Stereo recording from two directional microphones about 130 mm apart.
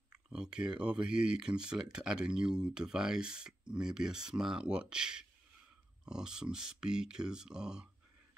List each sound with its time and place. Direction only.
0.3 s speech: 5° right (ahead or behind)